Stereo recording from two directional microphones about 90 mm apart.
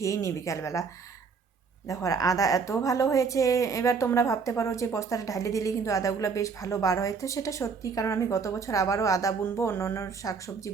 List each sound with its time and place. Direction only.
0.0 s a woman's voice: 35° left (ahead or behind)
1.9 s a woman's voice: 35° left (ahead or behind)
9.4 s speech: 25° left (ahead or behind)
10.2 s a woman's voice: 40° left (ahead or behind)